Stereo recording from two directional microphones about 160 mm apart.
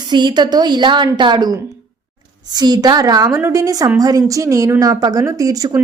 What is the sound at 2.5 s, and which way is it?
Speech, 25° right (ahead or behind).